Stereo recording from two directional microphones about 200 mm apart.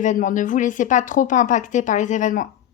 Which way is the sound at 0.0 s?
40° left (ahead or behind).